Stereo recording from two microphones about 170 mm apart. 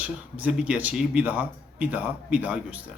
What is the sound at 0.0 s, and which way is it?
Speech, 10° right (ahead or behind).